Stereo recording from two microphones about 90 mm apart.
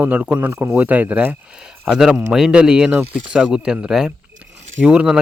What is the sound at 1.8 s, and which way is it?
Speech, 5° right (ahead or behind).